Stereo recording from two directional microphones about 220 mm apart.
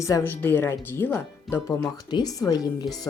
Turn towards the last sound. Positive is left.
turn(degrees=20)  # may be behind; listen again after turning